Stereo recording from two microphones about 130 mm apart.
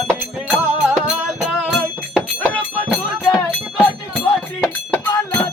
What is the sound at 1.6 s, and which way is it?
Music, 10° right (ahead or behind).